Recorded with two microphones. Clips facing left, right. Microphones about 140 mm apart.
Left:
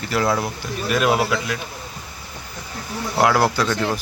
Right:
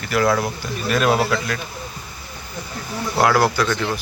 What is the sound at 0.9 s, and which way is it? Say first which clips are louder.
Speech: right 1 dB; 10° left (ahead or behind).